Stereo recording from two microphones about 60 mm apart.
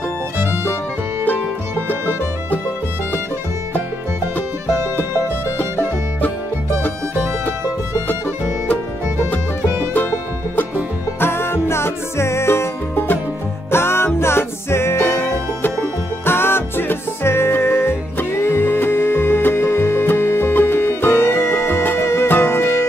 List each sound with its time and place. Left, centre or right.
11.1 s music: left